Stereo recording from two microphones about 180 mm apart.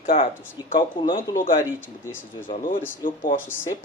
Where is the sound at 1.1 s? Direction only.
45° left (ahead or behind).